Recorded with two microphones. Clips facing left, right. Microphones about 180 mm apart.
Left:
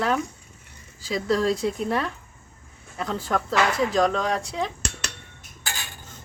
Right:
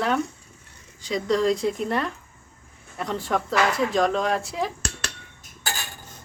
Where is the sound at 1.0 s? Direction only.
5° left (ahead or behind).